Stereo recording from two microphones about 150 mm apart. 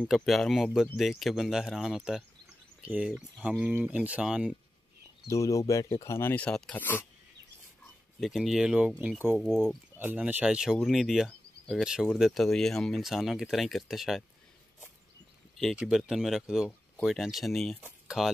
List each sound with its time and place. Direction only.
0.1 s speech: centre (ahead or behind)
3.1 s speech: 5° left (ahead or behind)
3.4 s speech: 10° right (ahead or behind)
5.3 s speech: 20° left (ahead or behind)
8.2 s speech: centre (ahead or behind)
9.4 s speech: centre (ahead or behind)
9.9 s speech: 10° right (ahead or behind)
15.6 s speech: 5° right (ahead or behind)